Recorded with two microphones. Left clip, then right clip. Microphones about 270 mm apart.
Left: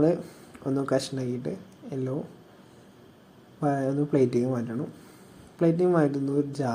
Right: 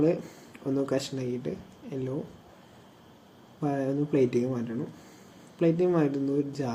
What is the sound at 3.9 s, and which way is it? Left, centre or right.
Speech, centre.